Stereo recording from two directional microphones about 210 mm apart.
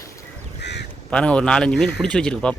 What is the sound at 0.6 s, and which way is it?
Crow, 55° left (ahead or behind).